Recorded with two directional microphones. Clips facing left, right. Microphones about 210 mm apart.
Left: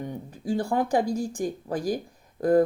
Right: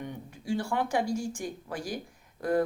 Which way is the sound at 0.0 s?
35° left (ahead or behind).